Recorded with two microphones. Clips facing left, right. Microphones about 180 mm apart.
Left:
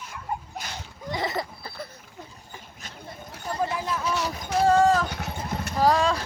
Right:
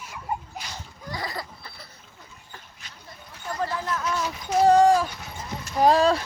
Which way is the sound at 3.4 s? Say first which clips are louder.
Left 1 dB; 20° left (ahead or behind).